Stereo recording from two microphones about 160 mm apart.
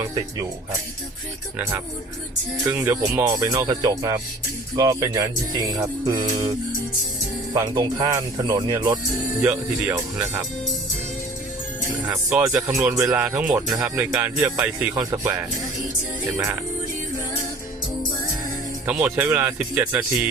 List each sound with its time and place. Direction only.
2.6 s speech: 20° right (ahead or behind)
7.5 s speech: 25° right (ahead or behind)
9.4 s speech: 10° right (ahead or behind)
12.3 s speech: 10° right (ahead or behind)
12.6 s speech: 20° right (ahead or behind)
13.1 s speech: 10° right (ahead or behind)
18.9 s speech: 10° right (ahead or behind)